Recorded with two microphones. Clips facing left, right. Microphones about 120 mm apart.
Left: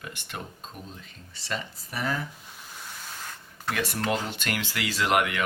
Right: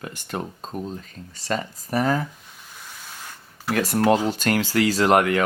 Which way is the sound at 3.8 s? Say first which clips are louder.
Right 9 dB; 40° right (ahead or behind).